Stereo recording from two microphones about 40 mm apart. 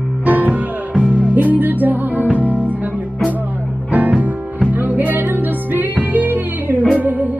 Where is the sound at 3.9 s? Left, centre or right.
Right.